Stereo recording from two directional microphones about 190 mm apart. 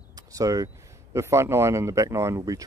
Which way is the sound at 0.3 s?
15° right (ahead or behind).